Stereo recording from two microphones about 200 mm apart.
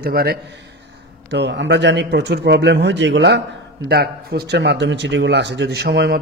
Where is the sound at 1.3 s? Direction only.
60° right (ahead or behind).